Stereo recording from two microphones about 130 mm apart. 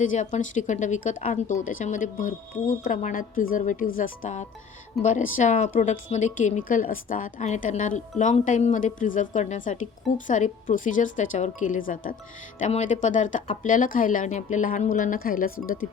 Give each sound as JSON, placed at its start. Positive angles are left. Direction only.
{"t": 0.0, "sound": "speech", "side_deg": 75}
{"t": 12.5, "sound": "speech", "side_deg": 65}